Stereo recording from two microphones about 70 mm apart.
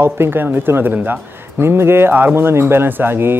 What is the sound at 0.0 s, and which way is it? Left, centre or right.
Speech, right.